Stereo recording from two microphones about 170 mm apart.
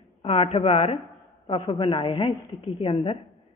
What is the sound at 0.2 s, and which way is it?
A woman's voice, 35° left (ahead or behind).